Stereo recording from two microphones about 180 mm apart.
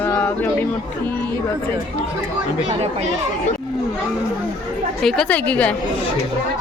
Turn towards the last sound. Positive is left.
turn(degrees=10)  # may be behind; listen again after turning